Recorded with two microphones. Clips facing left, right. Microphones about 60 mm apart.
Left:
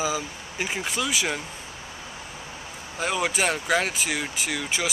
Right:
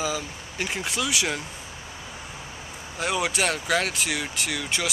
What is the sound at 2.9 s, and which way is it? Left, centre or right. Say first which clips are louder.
Speech: even; centre.